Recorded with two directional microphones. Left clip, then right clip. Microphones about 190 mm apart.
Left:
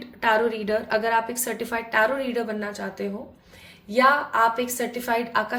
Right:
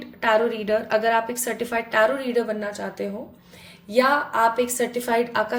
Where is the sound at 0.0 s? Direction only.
Centre (ahead or behind).